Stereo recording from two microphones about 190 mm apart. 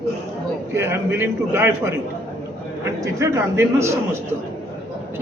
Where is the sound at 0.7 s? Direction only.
15° right (ahead or behind).